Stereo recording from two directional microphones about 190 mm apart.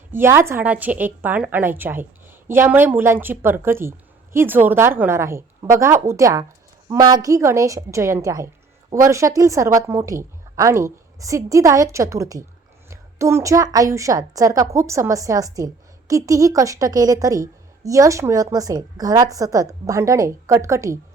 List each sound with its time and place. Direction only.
0.1 s a woman's voice: 10° right (ahead or behind)